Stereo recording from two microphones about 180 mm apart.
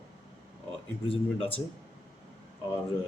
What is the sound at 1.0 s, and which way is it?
Speech, 30° left (ahead or behind).